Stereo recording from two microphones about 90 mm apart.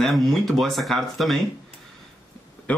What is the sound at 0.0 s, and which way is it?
Speech, centre (ahead or behind).